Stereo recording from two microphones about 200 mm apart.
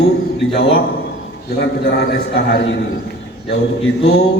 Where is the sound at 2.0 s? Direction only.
55° left (ahead or behind).